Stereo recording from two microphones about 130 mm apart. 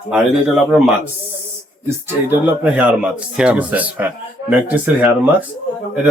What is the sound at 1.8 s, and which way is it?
Speech, 15° right (ahead or behind).